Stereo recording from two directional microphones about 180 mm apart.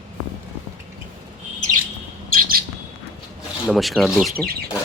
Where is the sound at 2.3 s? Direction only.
55° right (ahead or behind).